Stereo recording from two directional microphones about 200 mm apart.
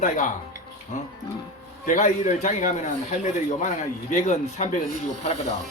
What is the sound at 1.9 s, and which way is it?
Speech, 35° left (ahead or behind).